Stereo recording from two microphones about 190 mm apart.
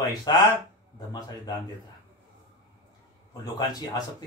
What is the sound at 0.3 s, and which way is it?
Speech, 20° left (ahead or behind).